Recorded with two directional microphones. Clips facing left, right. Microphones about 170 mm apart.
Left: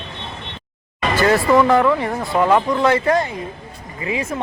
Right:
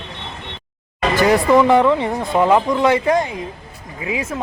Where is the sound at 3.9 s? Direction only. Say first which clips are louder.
Even; 5° right (ahead or behind).